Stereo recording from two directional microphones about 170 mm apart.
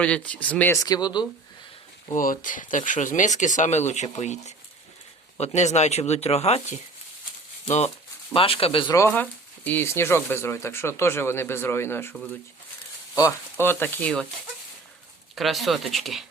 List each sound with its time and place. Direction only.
0.0 s speech: 10° left (ahead or behind); by 1.3 s 25° left (ahead or behind)
2.1 s speech: 50° left (ahead or behind); by 9.0 s 30° left (ahead or behind)
9.0 s speech: 10° left (ahead or behind)
15.4 s speech: centre (ahead or behind)